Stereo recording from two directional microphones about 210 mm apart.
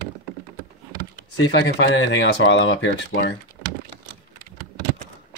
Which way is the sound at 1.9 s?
60° left (ahead or behind).